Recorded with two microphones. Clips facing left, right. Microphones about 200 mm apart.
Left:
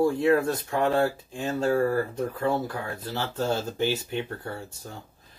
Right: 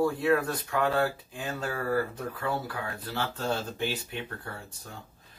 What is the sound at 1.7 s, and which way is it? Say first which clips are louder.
Speech: left 6 dB; 45° left (ahead or behind).